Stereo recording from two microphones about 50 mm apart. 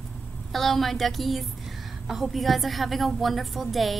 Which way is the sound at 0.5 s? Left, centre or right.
Centre.